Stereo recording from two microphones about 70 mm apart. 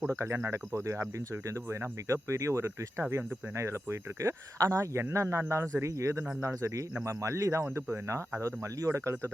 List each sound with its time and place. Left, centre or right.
0.1 s speech: right